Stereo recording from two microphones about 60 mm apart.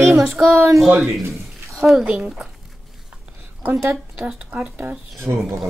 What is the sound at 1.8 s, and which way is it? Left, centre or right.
Speech, centre.